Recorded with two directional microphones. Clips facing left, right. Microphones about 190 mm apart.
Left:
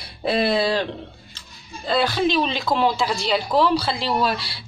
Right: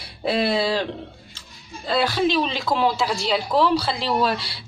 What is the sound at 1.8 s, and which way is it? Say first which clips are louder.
Speech: even; 5° right (ahead or behind).